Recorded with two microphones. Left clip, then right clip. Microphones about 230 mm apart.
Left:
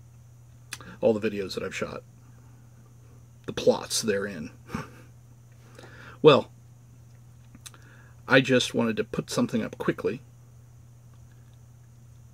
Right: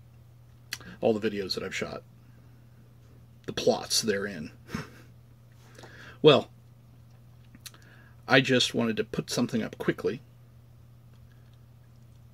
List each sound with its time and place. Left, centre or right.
0.7 s speech: centre
3.4 s speech: centre
5.8 s a sound: centre
7.6 s speech: centre